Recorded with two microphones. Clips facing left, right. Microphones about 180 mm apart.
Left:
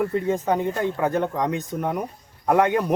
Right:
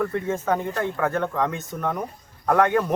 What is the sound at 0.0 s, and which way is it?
Speech, 15° left (ahead or behind).